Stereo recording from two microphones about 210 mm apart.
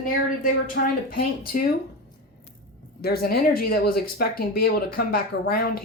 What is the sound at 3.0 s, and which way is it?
Speech, 45° left (ahead or behind).